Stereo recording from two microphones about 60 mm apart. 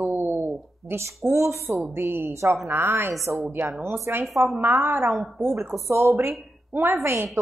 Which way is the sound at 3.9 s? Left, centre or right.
Right.